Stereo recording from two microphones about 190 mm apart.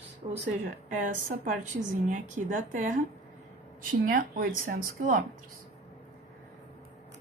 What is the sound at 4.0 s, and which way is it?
A woman's voice, 50° right (ahead or behind).